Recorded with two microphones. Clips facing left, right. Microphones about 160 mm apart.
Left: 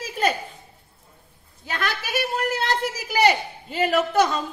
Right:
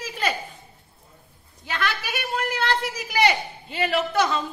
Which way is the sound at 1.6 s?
45° left (ahead or behind).